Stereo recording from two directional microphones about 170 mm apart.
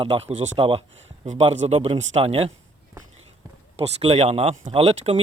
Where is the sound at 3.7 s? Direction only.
35° right (ahead or behind).